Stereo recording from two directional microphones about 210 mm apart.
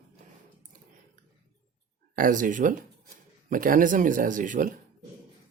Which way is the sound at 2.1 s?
40° right (ahead or behind).